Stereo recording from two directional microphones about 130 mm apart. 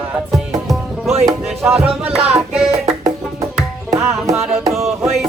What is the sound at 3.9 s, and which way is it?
Music, 25° right (ahead or behind).